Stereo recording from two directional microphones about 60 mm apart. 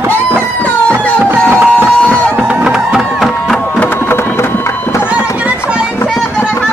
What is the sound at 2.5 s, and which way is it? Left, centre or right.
Music, centre.